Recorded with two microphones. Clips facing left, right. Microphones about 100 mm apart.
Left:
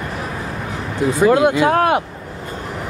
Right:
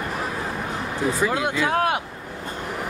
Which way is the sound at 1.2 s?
60° left (ahead or behind).